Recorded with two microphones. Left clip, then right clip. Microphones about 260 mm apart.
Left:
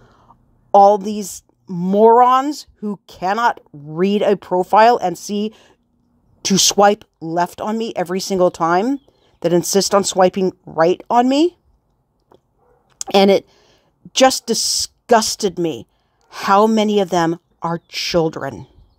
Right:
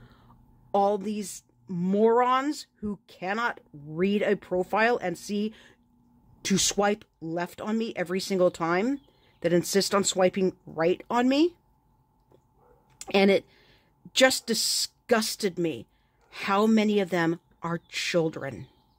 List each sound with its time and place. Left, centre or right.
0.0 s a woman's voice: centre
12.9 s speech: centre